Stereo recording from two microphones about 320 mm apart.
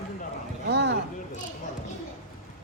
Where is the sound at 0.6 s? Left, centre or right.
Right.